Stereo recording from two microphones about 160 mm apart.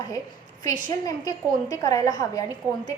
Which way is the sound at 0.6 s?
25° left (ahead or behind).